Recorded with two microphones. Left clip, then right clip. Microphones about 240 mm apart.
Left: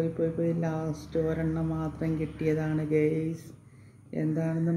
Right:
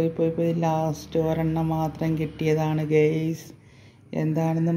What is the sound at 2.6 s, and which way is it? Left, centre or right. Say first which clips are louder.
Speech: right 7 dB; right.